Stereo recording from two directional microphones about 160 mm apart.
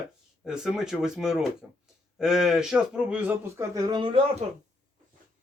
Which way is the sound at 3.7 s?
25° right (ahead or behind).